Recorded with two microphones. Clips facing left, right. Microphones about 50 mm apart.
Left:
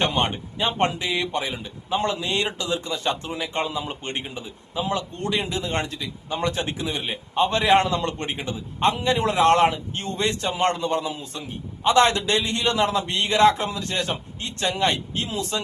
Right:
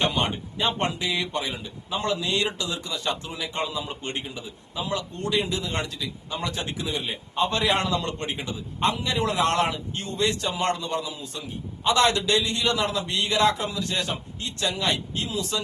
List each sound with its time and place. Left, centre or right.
0.0 s speech: left